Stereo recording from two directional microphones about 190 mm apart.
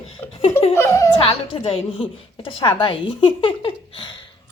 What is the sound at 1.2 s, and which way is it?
A woman's voice, 30° left (ahead or behind).